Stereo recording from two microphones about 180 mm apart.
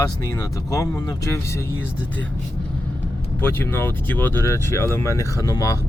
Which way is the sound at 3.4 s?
10° left (ahead or behind).